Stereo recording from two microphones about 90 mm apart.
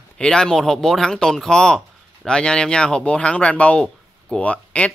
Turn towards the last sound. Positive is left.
turn(degrees=15)  # may be behind; listen again after turning